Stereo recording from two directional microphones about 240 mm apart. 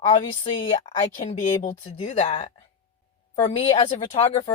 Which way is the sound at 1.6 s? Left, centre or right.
Left.